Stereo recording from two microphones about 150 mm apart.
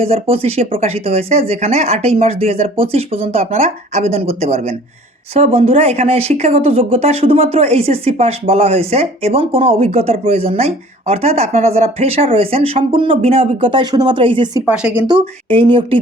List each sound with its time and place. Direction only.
0.0 s speech: 40° right (ahead or behind)
14.7 s speech: 10° right (ahead or behind)
15.0 s speech: 35° right (ahead or behind)